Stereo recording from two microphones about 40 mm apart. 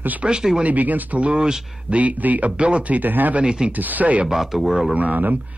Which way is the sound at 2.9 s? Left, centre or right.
Right.